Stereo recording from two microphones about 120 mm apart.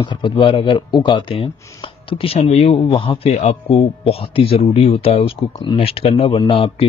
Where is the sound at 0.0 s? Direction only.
40° left (ahead or behind); by 2.8 s 60° left (ahead or behind).